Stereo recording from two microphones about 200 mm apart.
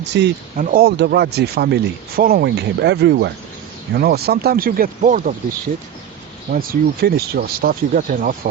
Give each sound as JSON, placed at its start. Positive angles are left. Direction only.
{"t": 0.0, "sound": "speech", "side_deg": -60}
{"t": 0.5, "sound": "speech", "side_deg": -40}
{"t": 6.5, "sound": "speech", "side_deg": -45}